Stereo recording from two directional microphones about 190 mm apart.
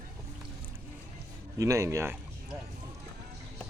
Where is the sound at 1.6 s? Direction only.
15° right (ahead or behind).